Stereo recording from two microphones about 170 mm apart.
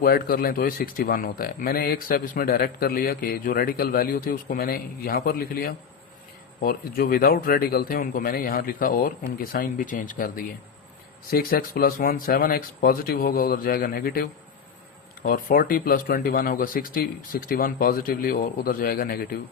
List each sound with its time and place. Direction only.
0.0 s speech: 60° left (ahead or behind)